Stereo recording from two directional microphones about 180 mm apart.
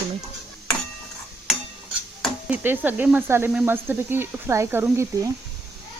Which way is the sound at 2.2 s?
10° right (ahead or behind).